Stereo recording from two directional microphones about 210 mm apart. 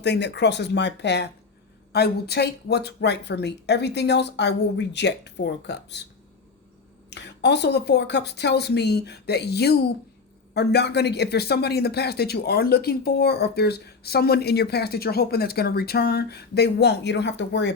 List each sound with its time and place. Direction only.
0.0 s speech: 55° left (ahead or behind)
7.1 s speech: 55° left (ahead or behind)